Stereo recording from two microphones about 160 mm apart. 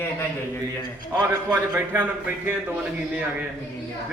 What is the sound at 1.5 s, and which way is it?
Speech, 10° right (ahead or behind).